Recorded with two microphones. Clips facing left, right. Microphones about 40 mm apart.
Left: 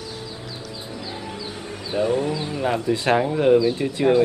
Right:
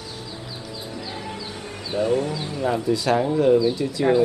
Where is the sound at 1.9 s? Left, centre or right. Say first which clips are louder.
Left 1 dB; centre.